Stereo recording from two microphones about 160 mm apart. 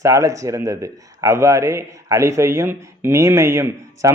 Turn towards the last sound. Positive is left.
turn(degrees=-15)  # may be behind; listen again after turning